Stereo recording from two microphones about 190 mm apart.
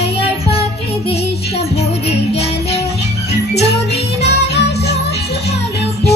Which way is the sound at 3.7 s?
60° left (ahead or behind).